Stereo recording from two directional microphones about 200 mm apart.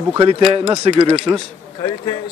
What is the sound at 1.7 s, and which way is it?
Speech, 20° left (ahead or behind).